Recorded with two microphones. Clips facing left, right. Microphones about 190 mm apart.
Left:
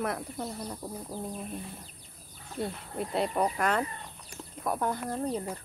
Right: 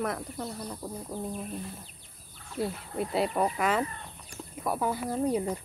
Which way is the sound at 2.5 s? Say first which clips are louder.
Right 2 dB; centre (ahead or behind).